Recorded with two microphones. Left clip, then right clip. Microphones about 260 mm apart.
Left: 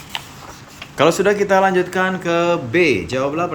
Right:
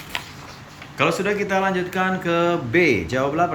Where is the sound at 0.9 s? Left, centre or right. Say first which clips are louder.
Left 6 dB; left.